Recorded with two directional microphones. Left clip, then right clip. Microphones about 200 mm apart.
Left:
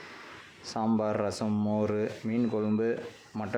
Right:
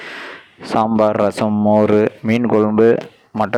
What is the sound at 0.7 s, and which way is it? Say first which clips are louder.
Speech: right 15 dB; 50° right (ahead or behind).